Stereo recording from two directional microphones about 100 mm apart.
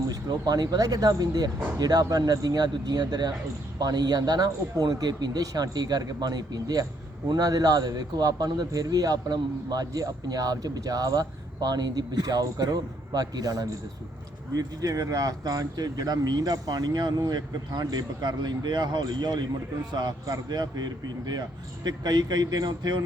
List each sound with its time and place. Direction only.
0.1 s a man's voice: 40° right (ahead or behind)